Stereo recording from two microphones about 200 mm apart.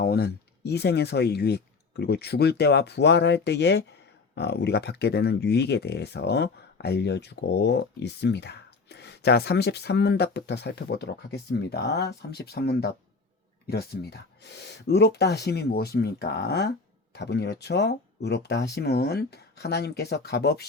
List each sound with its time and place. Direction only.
0.0 s speech: 50° left (ahead or behind)